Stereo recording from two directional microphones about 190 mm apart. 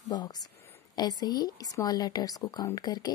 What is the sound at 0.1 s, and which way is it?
A woman's voice, 20° left (ahead or behind).